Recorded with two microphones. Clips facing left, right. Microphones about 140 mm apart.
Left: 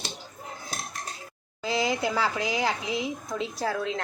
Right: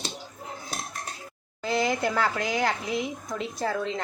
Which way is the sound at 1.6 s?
Centre (ahead or behind).